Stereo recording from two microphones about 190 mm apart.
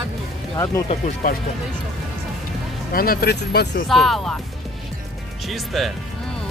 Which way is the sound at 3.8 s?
Centre (ahead or behind).